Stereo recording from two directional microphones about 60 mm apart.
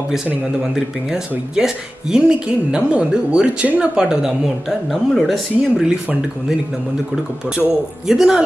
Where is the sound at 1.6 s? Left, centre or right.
Centre.